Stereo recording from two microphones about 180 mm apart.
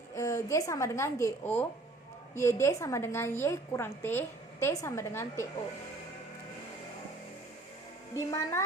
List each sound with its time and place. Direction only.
0.1 s a woman's voice: 15° left (ahead or behind)
8.1 s a woman's voice: 15° left (ahead or behind)